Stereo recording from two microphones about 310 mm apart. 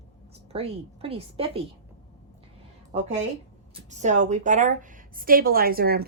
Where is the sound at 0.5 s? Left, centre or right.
Centre.